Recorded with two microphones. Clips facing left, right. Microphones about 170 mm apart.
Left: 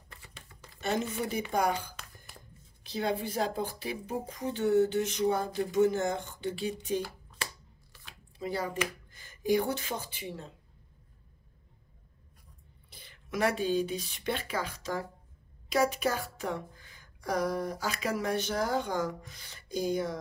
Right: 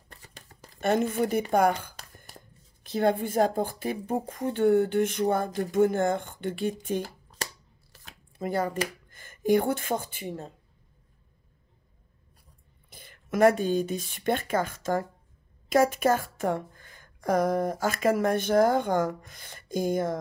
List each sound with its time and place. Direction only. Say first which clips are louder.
0.1 s a sound: right 2 dB; 40° right (ahead or behind)
0.7 s a woman's voice: right 7 dB; 55° right (ahead or behind)
7.4 s shuffling cards: right 3 dB; 40° right (ahead or behind)
7.9 s a sound: right 3 dB; 45° right (ahead or behind)
9.1 s speech: right 5 dB; 50° right (ahead or behind)
12.9 s a woman's voice: right 5 dB; 50° right (ahead or behind)